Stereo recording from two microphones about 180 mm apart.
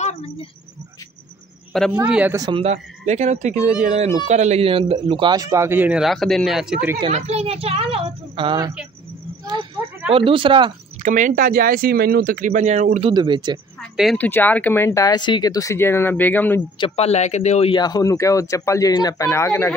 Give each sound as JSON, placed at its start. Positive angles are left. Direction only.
{"t": 0.0, "sound": "a sound", "side_deg": 35}
{"t": 1.7, "sound": "a man's voice", "side_deg": 0}
{"t": 2.3, "sound": "speech", "side_deg": -20}
{"t": 2.6, "sound": "speech", "side_deg": -40}
{"t": 7.1, "sound": "speech", "side_deg": -40}
{"t": 10.1, "sound": "speech", "side_deg": -30}
{"t": 11.0, "sound": "speech", "side_deg": -45}
{"t": 13.1, "sound": "speech", "side_deg": -25}
{"t": 14.1, "sound": "speech", "side_deg": 10}
{"t": 16.7, "sound": "speech", "side_deg": 30}